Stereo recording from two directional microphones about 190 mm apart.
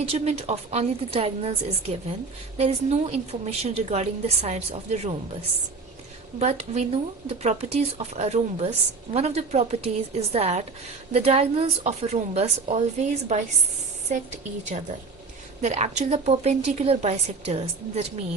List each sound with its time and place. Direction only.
0.1 s a woman's voice: 30° right (ahead or behind)
6.4 s a woman's voice: 35° right (ahead or behind)
15.6 s a woman's voice: 35° right (ahead or behind)